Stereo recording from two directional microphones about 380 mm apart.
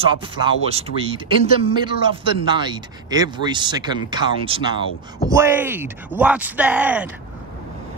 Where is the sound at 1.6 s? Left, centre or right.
Centre.